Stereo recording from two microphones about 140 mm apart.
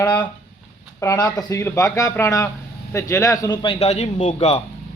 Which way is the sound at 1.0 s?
25° left (ahead or behind).